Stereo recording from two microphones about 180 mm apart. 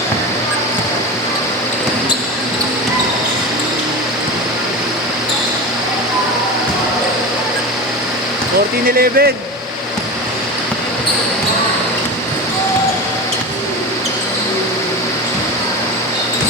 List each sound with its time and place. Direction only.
9.0 s speech: 60° right (ahead or behind)